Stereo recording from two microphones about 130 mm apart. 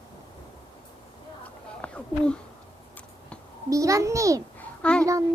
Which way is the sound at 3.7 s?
25° right (ahead or behind).